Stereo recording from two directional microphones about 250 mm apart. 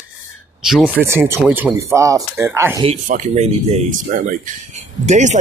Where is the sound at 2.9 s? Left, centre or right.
Right.